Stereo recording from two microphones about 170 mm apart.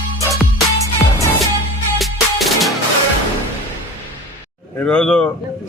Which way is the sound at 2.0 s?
Centre (ahead or behind).